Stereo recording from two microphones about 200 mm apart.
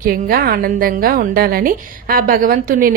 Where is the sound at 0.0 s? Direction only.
50° right (ahead or behind).